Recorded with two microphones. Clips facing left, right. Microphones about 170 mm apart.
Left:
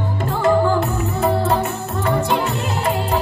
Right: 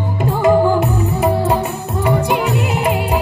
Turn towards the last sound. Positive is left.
turn(degrees=-15)  # may be behind; listen again after turning